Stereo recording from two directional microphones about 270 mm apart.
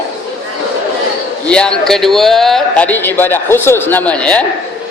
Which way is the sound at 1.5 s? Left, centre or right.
Centre.